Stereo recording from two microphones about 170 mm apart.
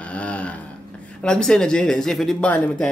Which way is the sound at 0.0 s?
5° left (ahead or behind).